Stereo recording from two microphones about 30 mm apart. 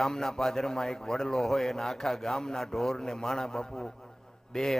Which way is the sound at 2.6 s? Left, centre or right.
Centre.